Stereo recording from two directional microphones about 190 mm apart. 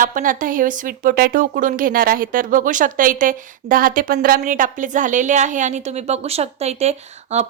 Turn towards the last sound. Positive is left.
turn(degrees=-35)  # may be behind; listen again after turning